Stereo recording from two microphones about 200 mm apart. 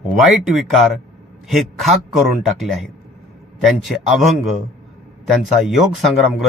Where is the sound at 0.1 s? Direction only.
Centre (ahead or behind).